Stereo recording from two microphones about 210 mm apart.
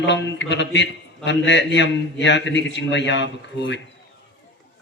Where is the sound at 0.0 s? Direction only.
55° left (ahead or behind).